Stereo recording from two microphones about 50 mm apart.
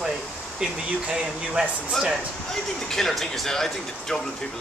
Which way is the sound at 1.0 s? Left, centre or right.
Centre.